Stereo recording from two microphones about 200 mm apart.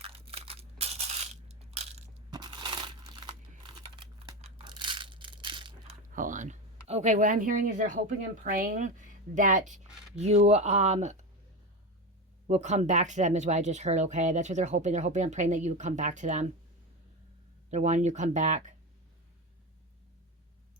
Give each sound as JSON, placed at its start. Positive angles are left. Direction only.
{"t": 0.0, "sound": "crushing", "side_deg": -30}
{"t": 2.3, "sound": "crumpling", "side_deg": -20}
{"t": 6.1, "sound": "a woman's voice", "side_deg": -40}
{"t": 12.5, "sound": "a woman's voice", "side_deg": -35}
{"t": 17.7, "sound": "a woman's voice", "side_deg": -35}